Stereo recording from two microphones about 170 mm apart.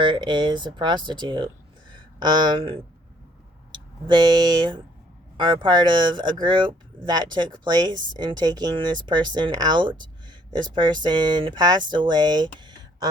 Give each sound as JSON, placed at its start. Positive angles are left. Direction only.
{"t": 0.0, "sound": "speech", "side_deg": -30}